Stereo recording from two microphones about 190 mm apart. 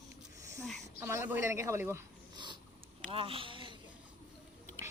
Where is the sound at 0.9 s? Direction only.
15° right (ahead or behind).